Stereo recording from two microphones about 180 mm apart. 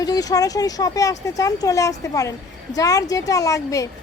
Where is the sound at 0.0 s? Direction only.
20° left (ahead or behind).